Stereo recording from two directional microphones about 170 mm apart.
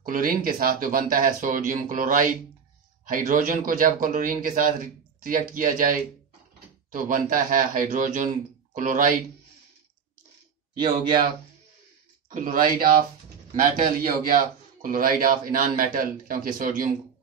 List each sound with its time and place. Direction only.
0.0 s speech: 55° right (ahead or behind)
12.3 s a man's voice: 55° right (ahead or behind)